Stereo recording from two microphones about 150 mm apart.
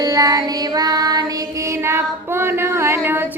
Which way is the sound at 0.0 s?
25° right (ahead or behind).